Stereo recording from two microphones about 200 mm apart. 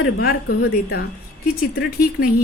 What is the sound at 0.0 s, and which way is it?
Speech, 50° left (ahead or behind).